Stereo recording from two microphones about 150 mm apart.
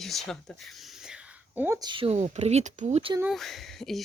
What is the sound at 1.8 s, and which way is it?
Speech, 35° right (ahead or behind).